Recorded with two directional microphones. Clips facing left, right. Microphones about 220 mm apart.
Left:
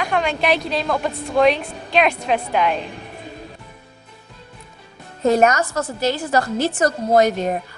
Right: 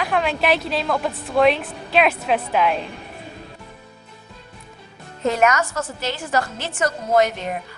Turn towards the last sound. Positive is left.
turn(degrees=40)  # may be behind; listen again after turning